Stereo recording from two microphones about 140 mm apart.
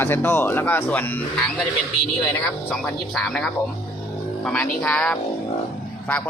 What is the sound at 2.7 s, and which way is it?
Speech, 5° left (ahead or behind).